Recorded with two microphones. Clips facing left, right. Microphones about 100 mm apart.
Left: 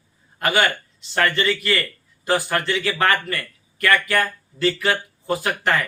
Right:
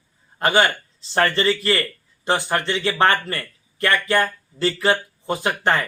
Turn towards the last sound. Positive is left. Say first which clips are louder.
# right 1 dB
turn(degrees=-25)  # may be behind; listen again after turning